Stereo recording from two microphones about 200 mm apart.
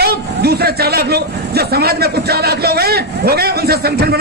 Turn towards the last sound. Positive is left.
turn(degrees=-50)  # may be behind; listen again after turning